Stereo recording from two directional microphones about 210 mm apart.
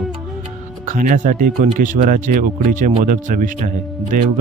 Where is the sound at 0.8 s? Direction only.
40° right (ahead or behind).